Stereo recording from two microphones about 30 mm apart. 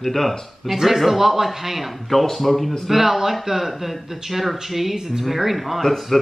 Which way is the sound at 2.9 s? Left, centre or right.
Centre.